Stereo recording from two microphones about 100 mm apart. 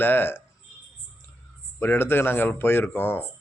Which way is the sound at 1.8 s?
20° left (ahead or behind).